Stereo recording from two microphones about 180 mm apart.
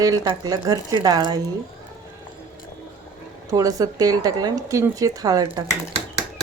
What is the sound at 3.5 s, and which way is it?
Speech, 20° right (ahead or behind).